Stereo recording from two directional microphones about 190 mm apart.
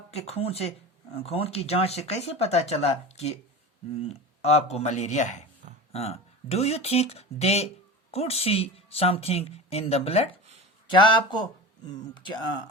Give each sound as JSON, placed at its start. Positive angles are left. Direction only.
{"t": 0.1, "sound": "a woman's voice", "side_deg": 35}